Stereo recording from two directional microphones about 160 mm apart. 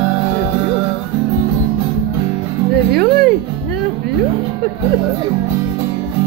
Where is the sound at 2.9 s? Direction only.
80° right.